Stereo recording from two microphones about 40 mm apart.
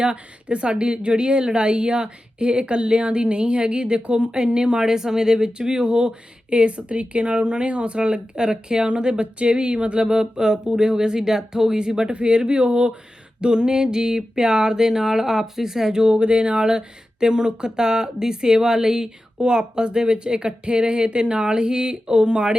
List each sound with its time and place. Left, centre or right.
0.0 s speech: right
13.4 s a sound: right
19.4 s speech: centre